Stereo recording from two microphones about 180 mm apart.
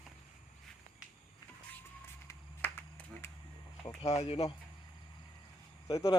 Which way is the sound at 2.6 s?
10° left (ahead or behind).